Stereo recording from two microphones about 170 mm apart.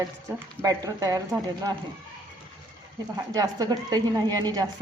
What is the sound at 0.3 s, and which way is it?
A woman's voice, 20° right (ahead or behind).